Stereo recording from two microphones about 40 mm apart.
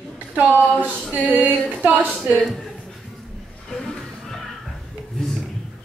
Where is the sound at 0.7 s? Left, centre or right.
Right.